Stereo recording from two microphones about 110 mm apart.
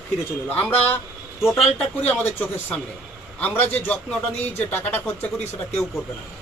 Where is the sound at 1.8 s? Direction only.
15° left (ahead or behind).